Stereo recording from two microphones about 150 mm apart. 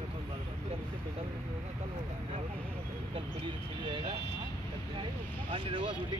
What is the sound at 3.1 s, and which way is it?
Speech, 35° right (ahead or behind).